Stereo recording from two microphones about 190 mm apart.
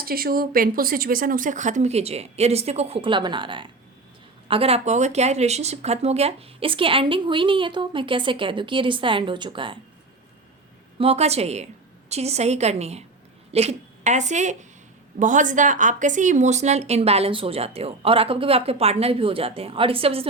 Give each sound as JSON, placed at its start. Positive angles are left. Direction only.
{"t": 0.0, "sound": "a woman's voice", "side_deg": -50}
{"t": 10.9, "sound": "a woman's voice", "side_deg": -30}